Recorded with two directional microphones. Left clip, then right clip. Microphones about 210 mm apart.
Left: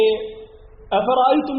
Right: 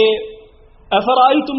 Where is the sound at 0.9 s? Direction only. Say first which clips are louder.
Right 4 dB; 25° right (ahead or behind).